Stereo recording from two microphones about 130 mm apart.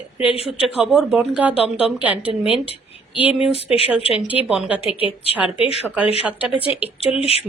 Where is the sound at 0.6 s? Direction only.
5° right (ahead or behind).